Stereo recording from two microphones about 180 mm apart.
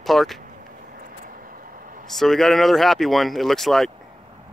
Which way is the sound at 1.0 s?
50° right (ahead or behind).